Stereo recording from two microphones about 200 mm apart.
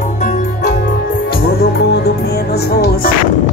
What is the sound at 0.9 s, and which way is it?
Music, 50° left (ahead or behind).